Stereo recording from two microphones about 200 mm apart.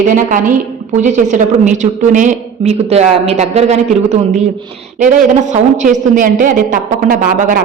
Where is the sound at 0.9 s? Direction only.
40° right (ahead or behind).